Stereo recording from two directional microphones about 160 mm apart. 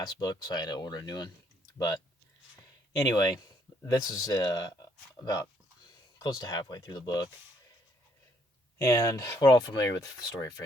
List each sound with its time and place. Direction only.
0.0 s speech: 25° left (ahead or behind)
2.9 s speech: 25° left (ahead or behind)
8.8 s speech: 20° left (ahead or behind)